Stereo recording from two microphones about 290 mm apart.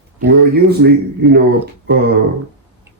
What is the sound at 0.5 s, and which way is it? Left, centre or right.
Speech, right.